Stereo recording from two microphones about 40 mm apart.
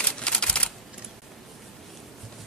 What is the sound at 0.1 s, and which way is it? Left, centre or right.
Typewriter, left.